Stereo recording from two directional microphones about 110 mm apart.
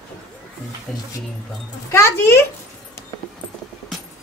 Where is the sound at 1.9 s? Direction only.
25° left (ahead or behind).